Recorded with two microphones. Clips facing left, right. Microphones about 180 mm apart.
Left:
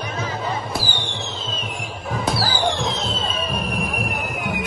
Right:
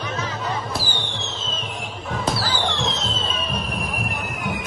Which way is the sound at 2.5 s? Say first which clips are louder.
Left 3 dB; 55° left (ahead or behind).